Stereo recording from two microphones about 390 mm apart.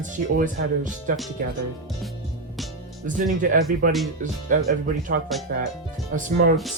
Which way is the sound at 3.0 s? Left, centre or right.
Right.